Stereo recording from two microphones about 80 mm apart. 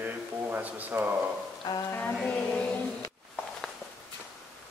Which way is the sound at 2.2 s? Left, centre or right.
Centre.